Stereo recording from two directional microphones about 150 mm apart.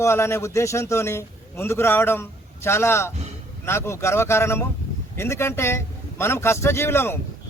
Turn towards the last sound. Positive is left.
turn(degrees=15)  # may be behind; listen again after turning